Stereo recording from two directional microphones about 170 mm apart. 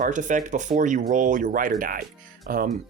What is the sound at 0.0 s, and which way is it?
Speech, 45° right (ahead or behind).